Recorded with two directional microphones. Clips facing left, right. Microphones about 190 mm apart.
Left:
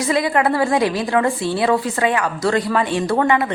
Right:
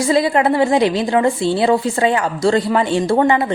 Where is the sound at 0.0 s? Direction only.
30° right (ahead or behind).